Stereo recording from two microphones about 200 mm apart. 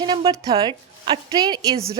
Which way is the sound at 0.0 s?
20° right (ahead or behind).